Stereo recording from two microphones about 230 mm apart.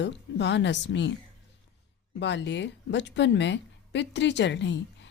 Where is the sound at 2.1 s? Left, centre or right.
Left.